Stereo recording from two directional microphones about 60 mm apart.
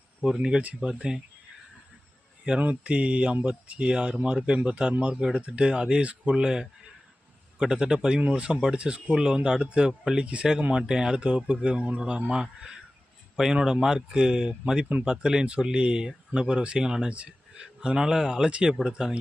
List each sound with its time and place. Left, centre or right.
0.3 s speech: centre
2.6 s speech: right